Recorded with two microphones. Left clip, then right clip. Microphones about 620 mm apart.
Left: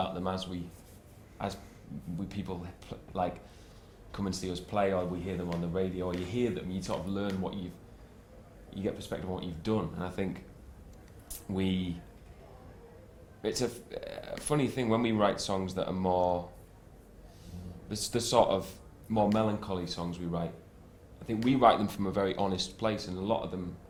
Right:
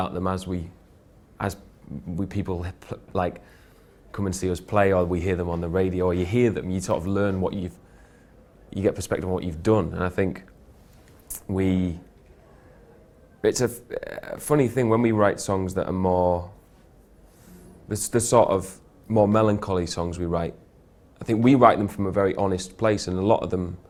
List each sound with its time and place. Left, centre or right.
0.0 s speech: right
8.7 s speech: right
11.5 s speech: right
13.4 s speech: right
17.8 s speech: right